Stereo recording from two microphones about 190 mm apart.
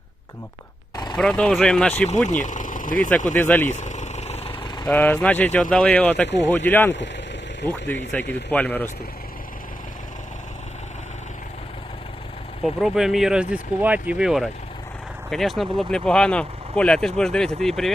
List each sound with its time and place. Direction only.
1.1 s speech: 5° left (ahead or behind)
2.3 s speech: 40° left (ahead or behind)
3.3 s speech: 10° left (ahead or behind)
3.7 s vehicle: 40° left (ahead or behind); by 4.9 s 25° left (ahead or behind)
4.9 s speech: 10° left (ahead or behind)
12.6 s speech: centre (ahead or behind)